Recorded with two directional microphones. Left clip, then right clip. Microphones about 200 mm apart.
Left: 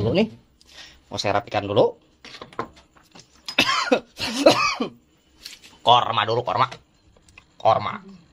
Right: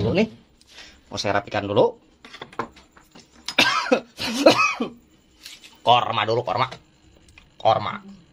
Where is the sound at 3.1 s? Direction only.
15° left (ahead or behind).